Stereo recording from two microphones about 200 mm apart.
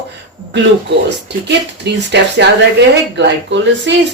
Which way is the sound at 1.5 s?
60° right (ahead or behind).